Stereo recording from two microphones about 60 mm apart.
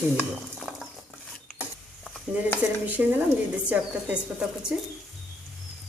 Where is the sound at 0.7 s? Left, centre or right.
Centre.